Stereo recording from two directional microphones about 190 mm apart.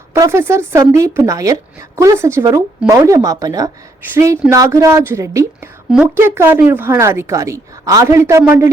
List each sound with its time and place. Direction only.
0.1 s speech: 15° right (ahead or behind)